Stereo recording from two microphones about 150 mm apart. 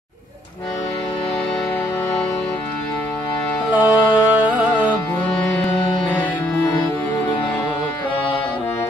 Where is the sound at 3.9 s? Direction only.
30° left (ahead or behind).